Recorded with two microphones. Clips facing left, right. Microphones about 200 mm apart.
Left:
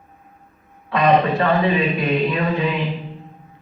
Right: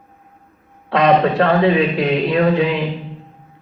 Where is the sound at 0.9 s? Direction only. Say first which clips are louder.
Right 3 dB; 75° right (ahead or behind).